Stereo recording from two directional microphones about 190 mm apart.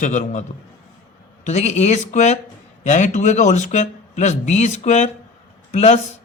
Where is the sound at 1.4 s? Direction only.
35° left (ahead or behind).